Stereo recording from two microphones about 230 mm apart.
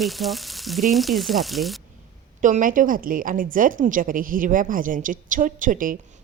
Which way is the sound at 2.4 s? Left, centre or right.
Right.